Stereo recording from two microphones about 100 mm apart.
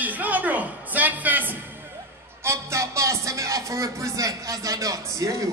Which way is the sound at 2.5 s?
30° right (ahead or behind).